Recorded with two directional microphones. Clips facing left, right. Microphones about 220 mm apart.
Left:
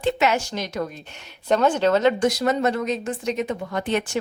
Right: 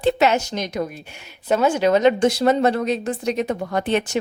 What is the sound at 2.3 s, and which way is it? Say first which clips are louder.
A woman's voice: right 4 dB; 30° right (ahead or behind).